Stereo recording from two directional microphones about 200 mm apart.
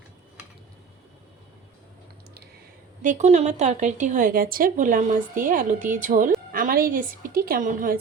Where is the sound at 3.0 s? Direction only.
35° right (ahead or behind).